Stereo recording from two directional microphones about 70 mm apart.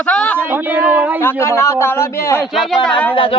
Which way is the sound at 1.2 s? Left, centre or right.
Left.